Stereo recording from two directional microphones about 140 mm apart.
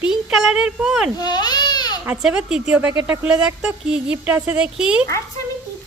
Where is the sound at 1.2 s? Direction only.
30° left (ahead or behind).